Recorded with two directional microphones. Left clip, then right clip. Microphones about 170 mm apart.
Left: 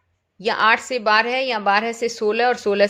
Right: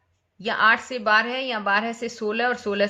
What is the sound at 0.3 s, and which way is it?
A woman's voice, 40° left (ahead or behind).